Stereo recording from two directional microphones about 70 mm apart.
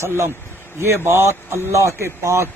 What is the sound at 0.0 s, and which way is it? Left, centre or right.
A man's voice, right.